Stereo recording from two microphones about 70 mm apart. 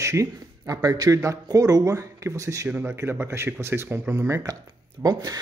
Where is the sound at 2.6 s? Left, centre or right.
Right.